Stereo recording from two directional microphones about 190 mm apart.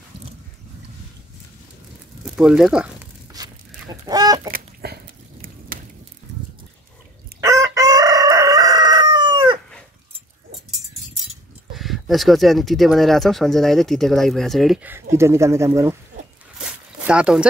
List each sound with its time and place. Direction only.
2.2 s speech: 5° right (ahead or behind)
3.3 s chicken: 20° right (ahead or behind)
4.5 s a sound: 55° right (ahead or behind)
7.3 s chicken: 20° right (ahead or behind)
11.7 s speech: centre (ahead or behind)
14.9 s speech: 15° right (ahead or behind)
16.5 s zipper: 5° right (ahead or behind)